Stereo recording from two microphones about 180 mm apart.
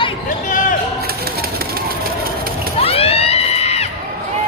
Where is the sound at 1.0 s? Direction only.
60° right (ahead or behind).